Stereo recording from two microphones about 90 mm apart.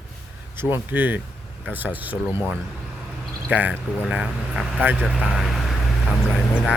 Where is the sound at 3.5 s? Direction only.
15° right (ahead or behind).